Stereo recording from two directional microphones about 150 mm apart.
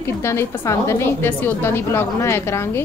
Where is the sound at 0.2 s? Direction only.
20° left (ahead or behind).